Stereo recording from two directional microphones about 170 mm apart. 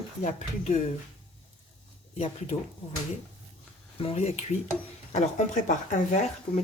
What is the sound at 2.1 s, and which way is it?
Speech, 40° left (ahead or behind).